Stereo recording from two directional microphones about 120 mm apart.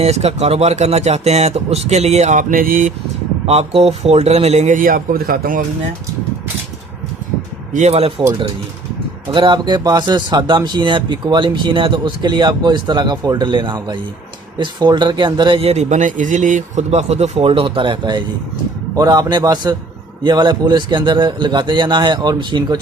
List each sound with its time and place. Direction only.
0.0 s speech: 60° right (ahead or behind); by 2.9 s 90° right
3.4 s speech: 55° right (ahead or behind); by 4.8 s 75° right (ahead or behind)
7.7 s speech: 70° right (ahead or behind)
9.3 s speech: 45° right (ahead or behind)
18.9 s speech: 30° right (ahead or behind)